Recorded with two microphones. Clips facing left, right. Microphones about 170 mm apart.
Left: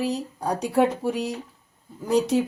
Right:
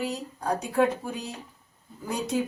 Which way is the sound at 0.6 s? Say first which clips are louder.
Left 4 dB; 80° left.